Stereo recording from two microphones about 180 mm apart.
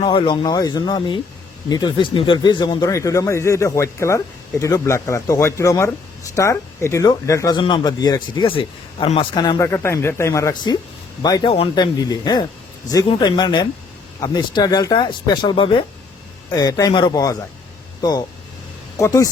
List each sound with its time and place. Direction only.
0.0 s speech: 25° left (ahead or behind)
18.9 s speech: 20° left (ahead or behind)